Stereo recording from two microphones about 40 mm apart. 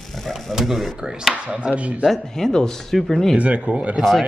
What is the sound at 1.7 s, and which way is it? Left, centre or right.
Speech, right.